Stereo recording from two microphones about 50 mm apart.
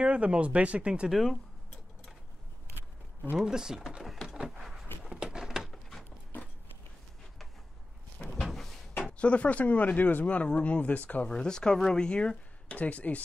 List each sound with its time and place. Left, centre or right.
0.0 s speech: right
1.1 s speech: centre
3.3 s speech: centre
4.5 s a sound: centre
5.6 s a sound: centre
8.5 s door: centre
9.2 s speech: left
11.2 s speech: centre